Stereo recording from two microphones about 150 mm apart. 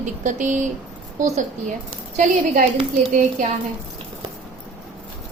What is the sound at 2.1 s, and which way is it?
Speech, 55° right (ahead or behind).